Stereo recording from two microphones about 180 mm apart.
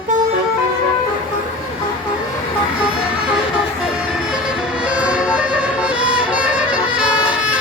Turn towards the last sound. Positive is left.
turn(degrees=-5)  # may be behind; listen again after turning